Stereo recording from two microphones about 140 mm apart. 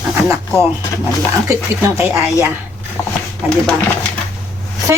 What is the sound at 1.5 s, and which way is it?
Speech, 20° right (ahead or behind).